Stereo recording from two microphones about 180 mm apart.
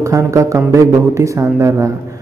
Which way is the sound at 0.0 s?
15° right (ahead or behind).